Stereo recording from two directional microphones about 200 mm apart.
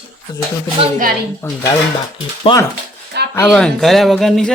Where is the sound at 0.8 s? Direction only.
30° right (ahead or behind).